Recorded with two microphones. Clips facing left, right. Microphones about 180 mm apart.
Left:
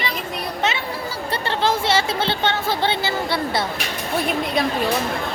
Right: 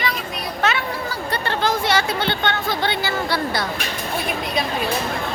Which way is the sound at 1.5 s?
25° left (ahead or behind).